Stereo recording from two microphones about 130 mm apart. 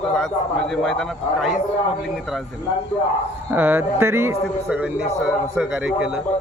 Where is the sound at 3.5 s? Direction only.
15° right (ahead or behind).